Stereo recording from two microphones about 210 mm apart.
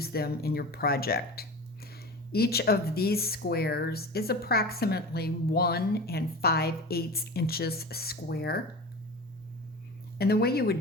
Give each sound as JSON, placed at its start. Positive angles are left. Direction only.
{"t": 0.0, "sound": "speech", "side_deg": 45}
{"t": 10.2, "sound": "speech", "side_deg": 50}